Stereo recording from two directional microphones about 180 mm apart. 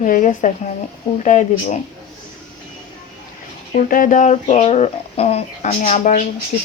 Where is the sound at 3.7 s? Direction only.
50° left (ahead or behind).